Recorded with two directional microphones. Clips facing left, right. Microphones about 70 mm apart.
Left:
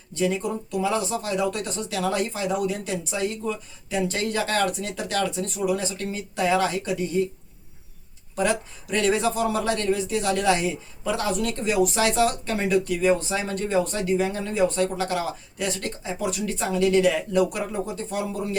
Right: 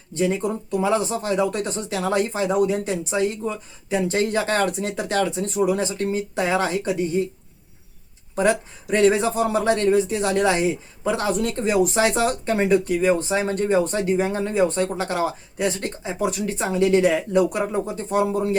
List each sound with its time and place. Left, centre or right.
0.1 s speech: right
8.4 s speech: right